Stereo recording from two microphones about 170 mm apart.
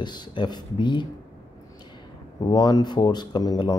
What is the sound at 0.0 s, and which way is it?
Speech, 25° left (ahead or behind).